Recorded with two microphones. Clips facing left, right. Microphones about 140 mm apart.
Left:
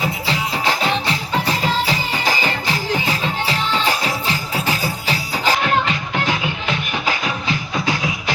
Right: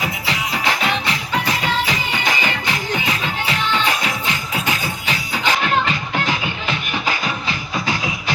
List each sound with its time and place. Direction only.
0.0 s music: 30° left (ahead or behind)